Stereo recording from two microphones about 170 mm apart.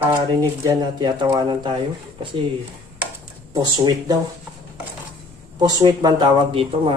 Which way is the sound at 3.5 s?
25° right (ahead or behind).